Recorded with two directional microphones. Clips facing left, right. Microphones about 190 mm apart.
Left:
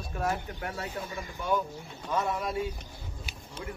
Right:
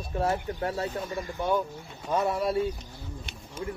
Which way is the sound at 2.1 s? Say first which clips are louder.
Right 4 dB; 35° right (ahead or behind).